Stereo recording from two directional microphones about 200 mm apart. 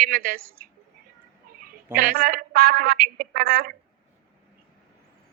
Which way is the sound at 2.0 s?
45° right (ahead or behind).